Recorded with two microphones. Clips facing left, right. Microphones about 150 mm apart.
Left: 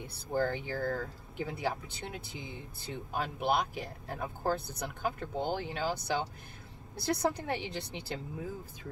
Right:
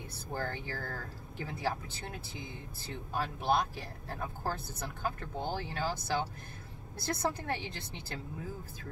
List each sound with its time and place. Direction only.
0.1 s speech: 15° left (ahead or behind)